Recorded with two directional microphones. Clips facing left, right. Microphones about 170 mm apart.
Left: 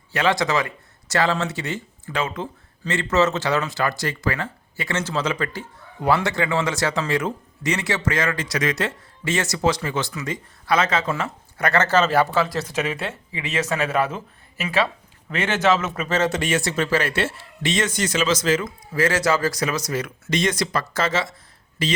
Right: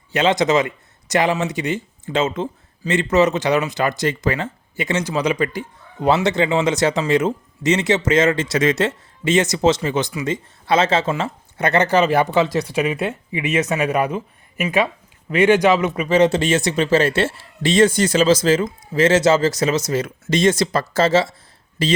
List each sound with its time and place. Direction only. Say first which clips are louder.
0.1 s speech: right 5 dB; 20° right (ahead or behind)
16.3 s speech: right 5 dB; 25° right (ahead or behind)